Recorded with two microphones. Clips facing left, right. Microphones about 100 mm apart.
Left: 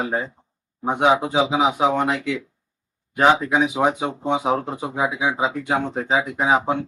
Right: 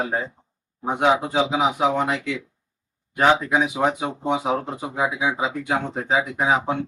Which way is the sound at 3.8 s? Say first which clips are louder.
Left 2 dB; 15° left (ahead or behind).